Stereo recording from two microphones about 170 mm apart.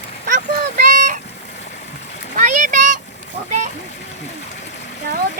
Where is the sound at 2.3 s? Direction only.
50° right (ahead or behind).